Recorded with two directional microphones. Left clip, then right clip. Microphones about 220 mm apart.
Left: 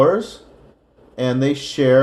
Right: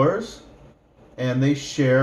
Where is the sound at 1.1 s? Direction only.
45° left (ahead or behind).